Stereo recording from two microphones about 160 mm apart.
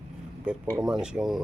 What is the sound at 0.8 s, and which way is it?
Speech, 5° right (ahead or behind).